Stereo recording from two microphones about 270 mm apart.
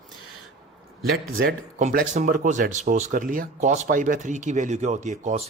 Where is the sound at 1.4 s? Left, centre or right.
Right.